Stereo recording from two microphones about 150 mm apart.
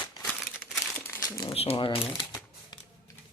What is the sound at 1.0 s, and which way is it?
Crumpling, 15° left (ahead or behind).